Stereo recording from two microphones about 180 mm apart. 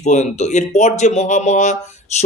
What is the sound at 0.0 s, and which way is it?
Speech, 40° left (ahead or behind).